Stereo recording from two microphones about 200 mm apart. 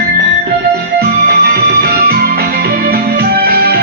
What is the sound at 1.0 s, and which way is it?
Music, 50° right (ahead or behind).